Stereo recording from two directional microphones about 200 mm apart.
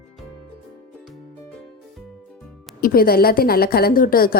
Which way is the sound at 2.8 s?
45° left (ahead or behind).